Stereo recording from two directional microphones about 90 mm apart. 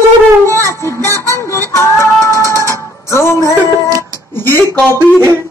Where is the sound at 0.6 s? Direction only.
30° left (ahead or behind).